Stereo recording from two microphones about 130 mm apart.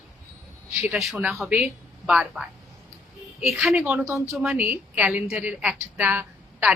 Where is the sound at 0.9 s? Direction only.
5° right (ahead or behind).